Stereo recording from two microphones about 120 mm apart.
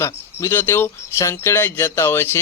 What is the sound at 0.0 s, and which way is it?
Speech, 20° left (ahead or behind).